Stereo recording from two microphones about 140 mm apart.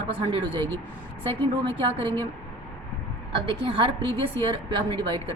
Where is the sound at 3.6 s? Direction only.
40° right (ahead or behind).